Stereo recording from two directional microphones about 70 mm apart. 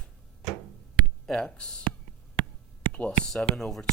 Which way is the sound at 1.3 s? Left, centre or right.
Centre.